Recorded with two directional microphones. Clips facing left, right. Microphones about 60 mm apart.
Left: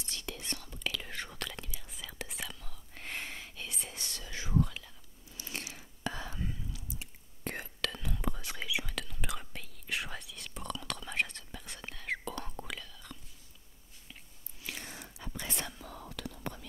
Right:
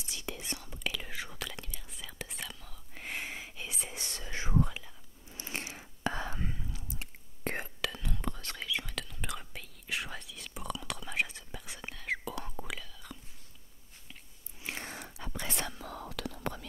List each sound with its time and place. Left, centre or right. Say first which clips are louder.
0.0 s whispering: right 1 dB; centre; by 7.5 s right
7.8 s whispering: left 4 dB; centre
14.6 s a sound: right 3 dB; right
14.9 s whispering: right 3 dB; right